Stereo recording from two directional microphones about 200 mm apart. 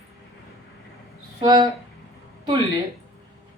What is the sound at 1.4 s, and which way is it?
Speech, 20° right (ahead or behind).